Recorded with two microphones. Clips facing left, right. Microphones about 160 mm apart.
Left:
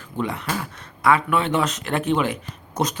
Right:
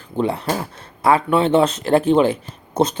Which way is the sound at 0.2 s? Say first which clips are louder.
Right 6 dB; 30° right (ahead or behind).